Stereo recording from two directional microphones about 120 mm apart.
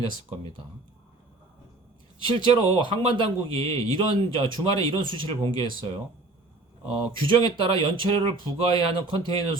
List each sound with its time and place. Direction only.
2.2 s a man's voice: 45° right (ahead or behind)
7.2 s a man's voice: 45° right (ahead or behind)